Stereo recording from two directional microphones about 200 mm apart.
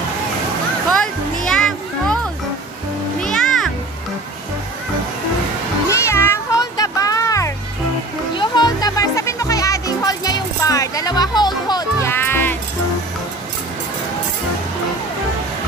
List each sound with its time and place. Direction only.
0.8 s music: 5° left (ahead or behind)
3.2 s music: 5° left (ahead or behind)
5.9 s music: 15° left (ahead or behind)